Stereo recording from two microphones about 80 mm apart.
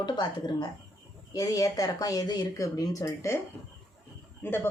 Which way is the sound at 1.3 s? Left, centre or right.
Left.